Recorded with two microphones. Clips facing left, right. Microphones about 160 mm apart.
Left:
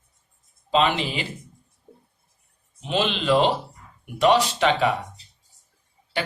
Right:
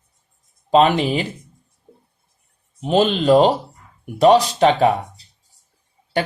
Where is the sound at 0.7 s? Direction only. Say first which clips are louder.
Right 7 dB; 45° right (ahead or behind).